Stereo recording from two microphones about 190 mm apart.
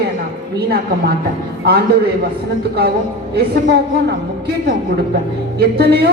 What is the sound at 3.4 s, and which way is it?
Speech, 60° right (ahead or behind).